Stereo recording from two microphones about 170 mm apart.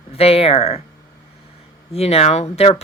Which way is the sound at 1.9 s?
35° left (ahead or behind).